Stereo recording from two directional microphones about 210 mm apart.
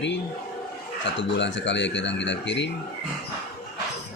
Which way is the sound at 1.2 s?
60° left (ahead or behind).